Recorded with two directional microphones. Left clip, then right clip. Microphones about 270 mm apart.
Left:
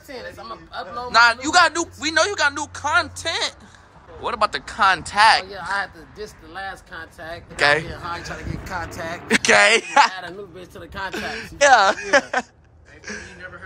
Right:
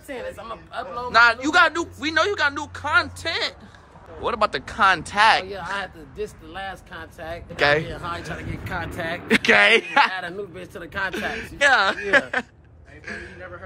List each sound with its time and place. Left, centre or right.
0.1 s speech: centre
0.9 s speech: centre
7.2 s speech: centre
7.5 s speech: centre
13.0 s a sound: centre